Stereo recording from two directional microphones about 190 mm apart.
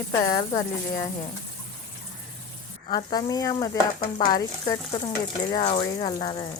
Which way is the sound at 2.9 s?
25° left (ahead or behind).